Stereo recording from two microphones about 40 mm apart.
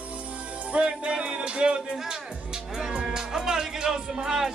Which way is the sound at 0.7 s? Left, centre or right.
Right.